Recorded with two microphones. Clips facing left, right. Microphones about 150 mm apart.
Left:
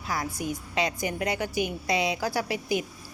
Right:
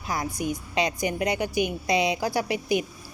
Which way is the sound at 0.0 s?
20° right (ahead or behind).